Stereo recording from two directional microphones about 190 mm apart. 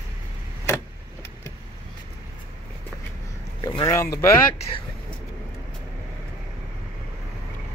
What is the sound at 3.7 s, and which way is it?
Speech, 20° left (ahead or behind).